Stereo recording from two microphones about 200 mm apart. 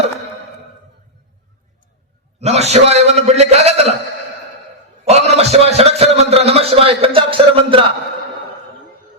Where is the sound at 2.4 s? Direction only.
30° right (ahead or behind).